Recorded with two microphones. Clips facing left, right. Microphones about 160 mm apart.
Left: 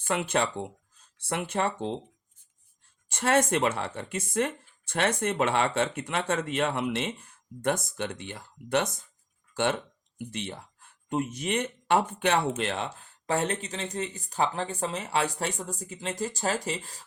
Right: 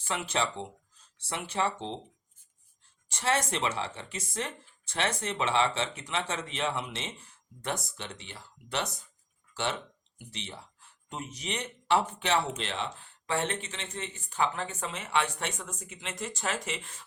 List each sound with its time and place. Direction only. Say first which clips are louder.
0.0 s speech: left 4 dB; 55° left (ahead or behind)
3.1 s speech: left 5 dB; 55° left (ahead or behind); by 17.1 s 35° left (ahead or behind)